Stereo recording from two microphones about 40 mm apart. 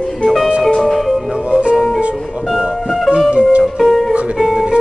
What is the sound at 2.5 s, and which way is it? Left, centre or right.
Music, centre.